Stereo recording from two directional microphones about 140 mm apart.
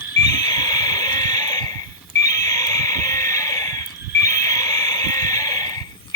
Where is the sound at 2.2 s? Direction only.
25° left (ahead or behind).